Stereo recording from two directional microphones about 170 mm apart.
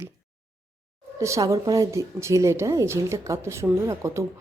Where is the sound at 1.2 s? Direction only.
20° right (ahead or behind).